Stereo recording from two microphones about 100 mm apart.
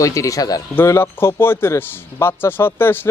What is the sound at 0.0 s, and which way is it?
Speech, 35° left (ahead or behind).